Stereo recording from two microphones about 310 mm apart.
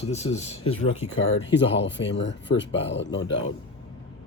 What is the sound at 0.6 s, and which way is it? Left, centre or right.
Speech, left.